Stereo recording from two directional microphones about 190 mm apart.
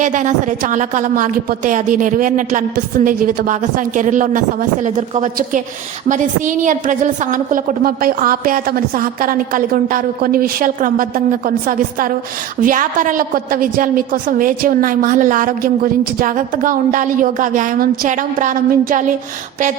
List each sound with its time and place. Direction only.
0.0 s a woman's voice: 40° right (ahead or behind)